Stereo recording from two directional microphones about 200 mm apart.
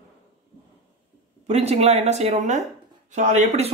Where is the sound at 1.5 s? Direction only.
35° right (ahead or behind).